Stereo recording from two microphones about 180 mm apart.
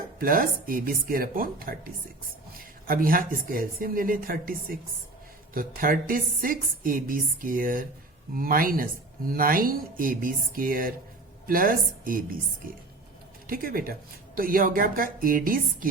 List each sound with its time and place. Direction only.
0.2 s speech: 50° right (ahead or behind)